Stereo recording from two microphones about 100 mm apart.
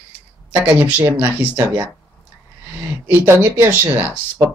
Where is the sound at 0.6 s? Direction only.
15° right (ahead or behind).